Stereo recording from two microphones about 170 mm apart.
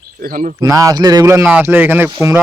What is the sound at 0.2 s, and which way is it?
Speech, 55° right (ahead or behind).